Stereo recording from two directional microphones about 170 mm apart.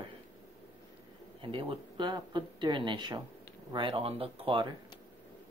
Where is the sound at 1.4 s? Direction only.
30° right (ahead or behind).